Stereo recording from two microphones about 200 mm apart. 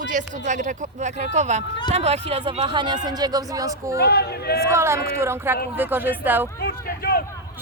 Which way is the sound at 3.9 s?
55° left (ahead or behind).